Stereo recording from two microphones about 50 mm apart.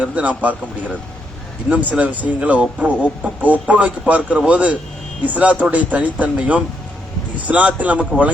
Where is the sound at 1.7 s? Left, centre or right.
Right.